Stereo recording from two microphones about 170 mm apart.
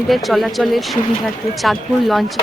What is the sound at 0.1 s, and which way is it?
Speech, centre (ahead or behind).